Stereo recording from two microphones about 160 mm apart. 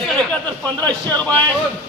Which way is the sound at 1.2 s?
10° left (ahead or behind).